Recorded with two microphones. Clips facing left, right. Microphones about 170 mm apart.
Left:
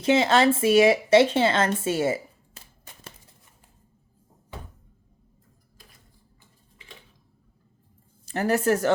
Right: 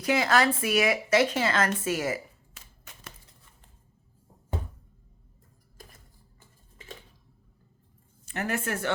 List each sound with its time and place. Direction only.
0.0 s speech: 25° left (ahead or behind)
6.8 s a sound: 45° right (ahead or behind)
8.2 s speech: 35° left (ahead or behind)